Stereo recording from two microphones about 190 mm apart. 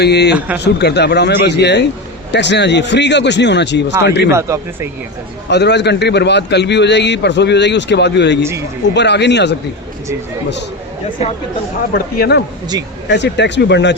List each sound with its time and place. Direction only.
0.0 s a man's voice: 60° left (ahead or behind)
0.3 s speech: 10° right (ahead or behind)
0.6 s a man's voice: 60° left (ahead or behind)
4.3 s speech: 15° right (ahead or behind)
5.5 s a man's voice: 65° left (ahead or behind)
11.9 s a man's voice: 50° left (ahead or behind)
12.7 s speech: 20° right (ahead or behind)
13.1 s a man's voice: 65° left (ahead or behind)